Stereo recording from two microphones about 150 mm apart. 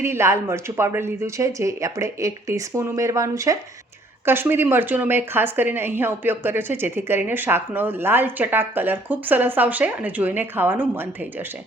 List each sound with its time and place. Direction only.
0.0 s a woman's voice: 15° right (ahead or behind)